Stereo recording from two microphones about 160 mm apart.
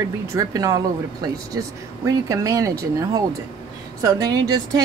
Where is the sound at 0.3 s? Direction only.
20° right (ahead or behind).